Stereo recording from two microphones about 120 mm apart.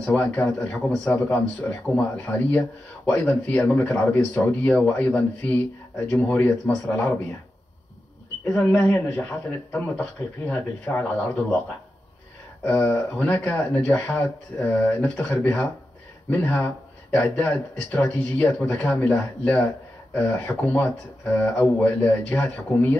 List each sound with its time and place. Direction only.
0.0 s speech: 15° left (ahead or behind)
8.5 s speech: 15° left (ahead or behind)
12.6 s speech: 15° left (ahead or behind)